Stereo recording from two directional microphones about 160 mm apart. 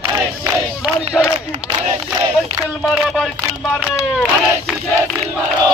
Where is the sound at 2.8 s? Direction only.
Centre (ahead or behind).